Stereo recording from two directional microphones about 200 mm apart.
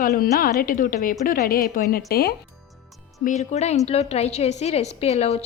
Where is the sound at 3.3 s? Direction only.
35° left (ahead or behind).